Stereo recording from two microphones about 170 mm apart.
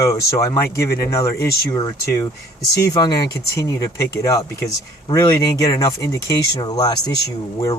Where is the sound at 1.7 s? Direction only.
30° left (ahead or behind).